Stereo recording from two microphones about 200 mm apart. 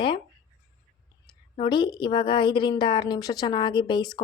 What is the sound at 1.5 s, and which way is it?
A woman's voice, 25° left (ahead or behind).